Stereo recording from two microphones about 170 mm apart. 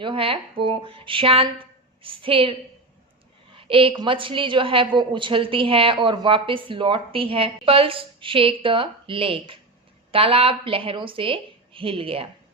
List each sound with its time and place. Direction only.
0.0 s a woman's voice: 30° right (ahead or behind)
3.6 s a woman's voice: 30° right (ahead or behind)